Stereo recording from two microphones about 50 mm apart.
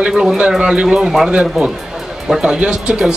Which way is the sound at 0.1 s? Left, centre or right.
Centre.